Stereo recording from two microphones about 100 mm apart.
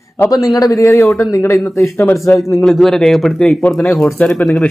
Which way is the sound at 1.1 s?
Centre (ahead or behind).